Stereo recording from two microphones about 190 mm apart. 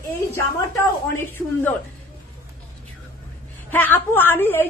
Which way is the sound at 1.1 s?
10° left (ahead or behind).